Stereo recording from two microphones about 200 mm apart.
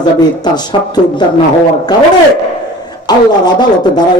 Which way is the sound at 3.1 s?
20° left (ahead or behind).